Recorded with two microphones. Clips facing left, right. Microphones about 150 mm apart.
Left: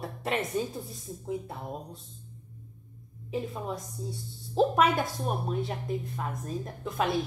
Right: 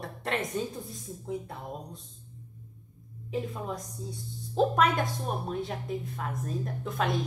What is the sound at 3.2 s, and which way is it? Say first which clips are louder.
A woman's voice: even; centre (ahead or behind).